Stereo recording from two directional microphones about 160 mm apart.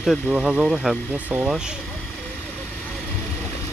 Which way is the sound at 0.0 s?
5° right (ahead or behind).